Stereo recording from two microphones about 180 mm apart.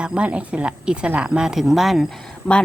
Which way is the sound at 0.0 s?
5° right (ahead or behind).